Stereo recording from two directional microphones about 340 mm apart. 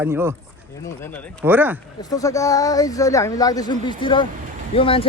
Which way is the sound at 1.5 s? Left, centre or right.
Centre.